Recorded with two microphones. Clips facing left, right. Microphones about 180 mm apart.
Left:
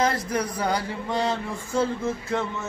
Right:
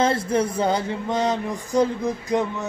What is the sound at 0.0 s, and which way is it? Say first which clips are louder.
Speech: right 4 dB; 25° right (ahead or behind).